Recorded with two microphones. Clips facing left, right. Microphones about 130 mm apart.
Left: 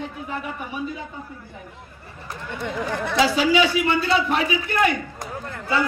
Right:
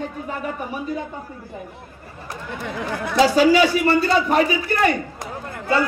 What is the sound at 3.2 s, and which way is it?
A man's voice, 40° right (ahead or behind).